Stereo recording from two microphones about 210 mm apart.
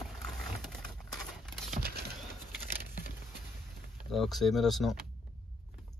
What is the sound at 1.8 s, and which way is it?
Typing, 50° right (ahead or behind).